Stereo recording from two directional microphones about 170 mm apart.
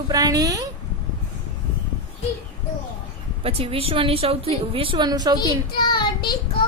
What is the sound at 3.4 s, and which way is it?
A woman's voice, 35° right (ahead or behind).